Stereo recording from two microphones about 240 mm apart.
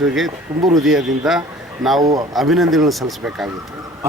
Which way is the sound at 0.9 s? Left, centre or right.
Centre.